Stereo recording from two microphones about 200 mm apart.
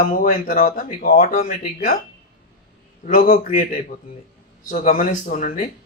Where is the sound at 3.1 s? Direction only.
40° left (ahead or behind).